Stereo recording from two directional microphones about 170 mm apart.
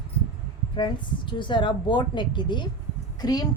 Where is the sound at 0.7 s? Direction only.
30° left (ahead or behind).